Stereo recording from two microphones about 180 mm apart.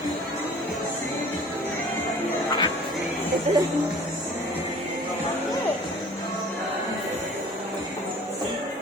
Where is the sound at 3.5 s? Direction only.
35° right (ahead or behind).